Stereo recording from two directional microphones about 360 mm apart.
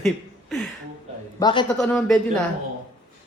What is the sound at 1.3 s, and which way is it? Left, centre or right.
Speech, centre.